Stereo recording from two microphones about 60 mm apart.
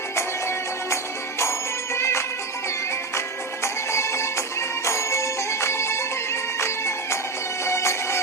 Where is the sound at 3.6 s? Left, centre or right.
Left.